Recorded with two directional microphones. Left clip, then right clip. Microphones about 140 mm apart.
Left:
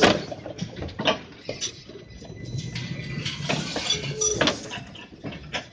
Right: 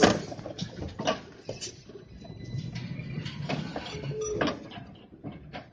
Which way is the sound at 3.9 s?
15° right (ahead or behind).